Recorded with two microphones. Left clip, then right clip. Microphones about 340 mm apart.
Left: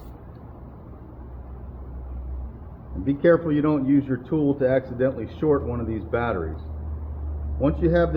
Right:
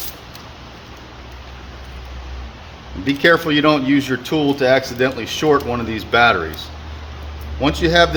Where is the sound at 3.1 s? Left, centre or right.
Right.